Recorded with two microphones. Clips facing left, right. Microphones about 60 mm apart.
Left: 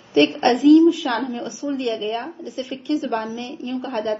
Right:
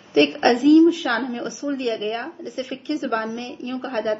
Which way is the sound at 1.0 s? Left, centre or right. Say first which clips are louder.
Even; right.